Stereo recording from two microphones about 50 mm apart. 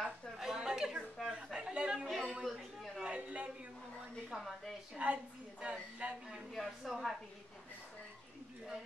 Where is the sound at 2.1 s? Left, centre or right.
Centre.